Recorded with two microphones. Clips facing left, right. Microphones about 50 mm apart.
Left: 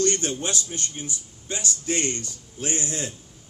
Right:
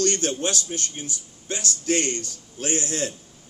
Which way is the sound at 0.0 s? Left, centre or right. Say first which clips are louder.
Right 1 dB; left.